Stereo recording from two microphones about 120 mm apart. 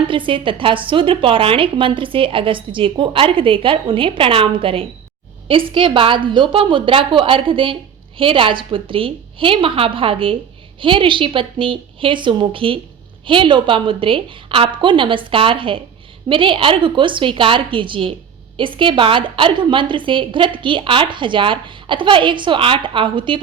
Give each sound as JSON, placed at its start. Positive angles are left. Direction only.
{"t": 0.1, "sound": "a woman's voice", "side_deg": -45}